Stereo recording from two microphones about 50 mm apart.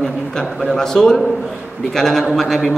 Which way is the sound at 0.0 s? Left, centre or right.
Centre.